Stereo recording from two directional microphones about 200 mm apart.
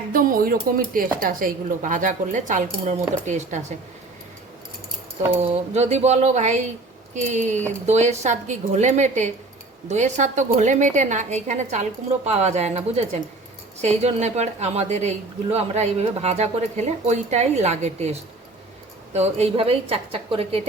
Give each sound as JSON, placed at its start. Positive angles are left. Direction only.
{"t": 0.1, "sound": "a woman's voice", "side_deg": -45}
{"t": 5.4, "sound": "a woman's voice", "side_deg": -30}